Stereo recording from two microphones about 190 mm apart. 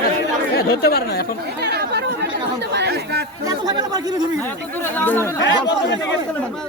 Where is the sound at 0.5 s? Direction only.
55° left (ahead or behind).